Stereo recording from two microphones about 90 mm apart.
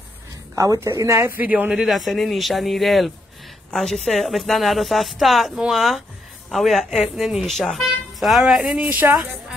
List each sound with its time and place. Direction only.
0.6 s a woman's voice: 35° right (ahead or behind)
1.4 s a woman's voice: 20° right (ahead or behind)
1.7 s speech: 5° right (ahead or behind)
8.8 s a woman's voice: 20° right (ahead or behind)